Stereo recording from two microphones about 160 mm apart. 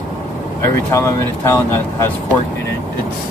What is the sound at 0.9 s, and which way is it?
Speech, 15° left (ahead or behind).